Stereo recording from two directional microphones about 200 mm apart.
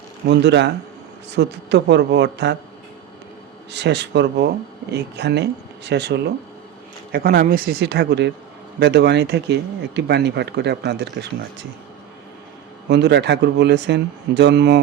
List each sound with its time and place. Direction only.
0.3 s speech: 60° right (ahead or behind)
3.7 s speech: 60° right (ahead or behind)
12.9 s speech: 60° right (ahead or behind)